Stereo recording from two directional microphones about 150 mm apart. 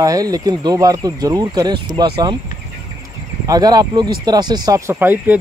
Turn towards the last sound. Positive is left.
turn(degrees=-15)  # may be behind; listen again after turning